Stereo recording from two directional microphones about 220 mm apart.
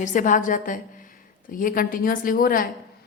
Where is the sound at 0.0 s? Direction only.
35° left (ahead or behind).